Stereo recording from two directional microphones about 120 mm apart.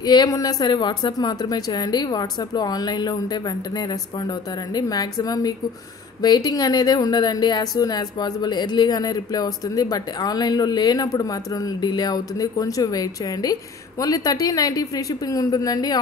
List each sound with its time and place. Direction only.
0.0 s a woman's voice: 35° left (ahead or behind)